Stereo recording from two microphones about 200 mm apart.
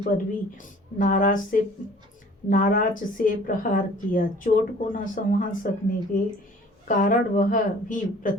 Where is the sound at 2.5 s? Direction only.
40° left (ahead or behind).